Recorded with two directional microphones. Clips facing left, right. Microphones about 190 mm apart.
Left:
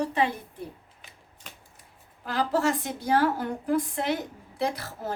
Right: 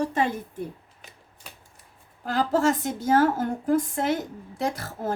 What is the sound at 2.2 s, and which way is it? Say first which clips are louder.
A woman's voice: right 3 dB; 45° right (ahead or behind).